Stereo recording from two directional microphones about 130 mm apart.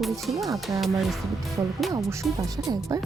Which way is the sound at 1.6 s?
25° right (ahead or behind).